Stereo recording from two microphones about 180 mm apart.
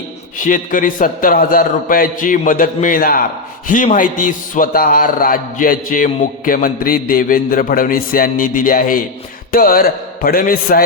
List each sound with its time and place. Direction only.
0.3 s a man's voice: 45° left (ahead or behind)